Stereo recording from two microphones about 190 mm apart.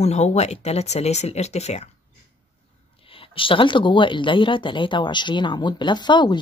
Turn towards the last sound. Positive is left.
turn(degrees=25)  # may be behind; listen again after turning